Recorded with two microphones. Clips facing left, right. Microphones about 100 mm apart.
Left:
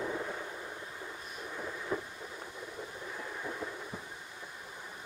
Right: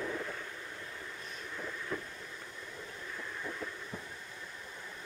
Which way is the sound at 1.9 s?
20° left (ahead or behind).